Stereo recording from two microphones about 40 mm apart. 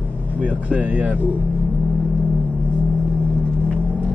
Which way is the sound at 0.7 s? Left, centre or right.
Right.